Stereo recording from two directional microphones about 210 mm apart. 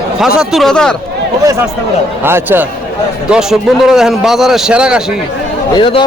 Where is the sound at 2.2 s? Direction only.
10° right (ahead or behind).